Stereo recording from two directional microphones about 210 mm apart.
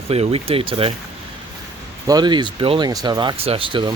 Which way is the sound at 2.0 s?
20° right (ahead or behind).